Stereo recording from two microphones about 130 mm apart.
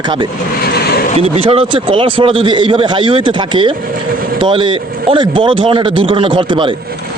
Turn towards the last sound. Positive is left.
turn(degrees=-40)  # may be behind; listen again after turning